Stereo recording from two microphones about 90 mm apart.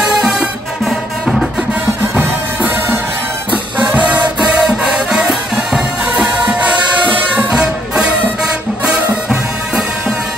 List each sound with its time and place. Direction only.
0.0 s music: 5° right (ahead or behind)
2.1 s music: 20° right (ahead or behind)